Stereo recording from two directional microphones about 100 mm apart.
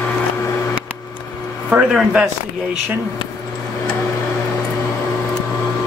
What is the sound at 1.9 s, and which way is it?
Speech, 10° right (ahead or behind).